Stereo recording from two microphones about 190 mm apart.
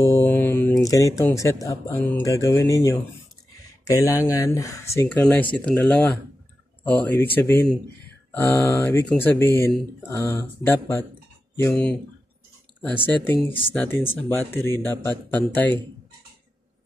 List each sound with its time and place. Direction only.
0.0 s mantra: 10° left (ahead or behind)
1.4 s speech: 15° left (ahead or behind)